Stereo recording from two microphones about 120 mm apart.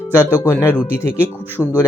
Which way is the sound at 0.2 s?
20° left (ahead or behind).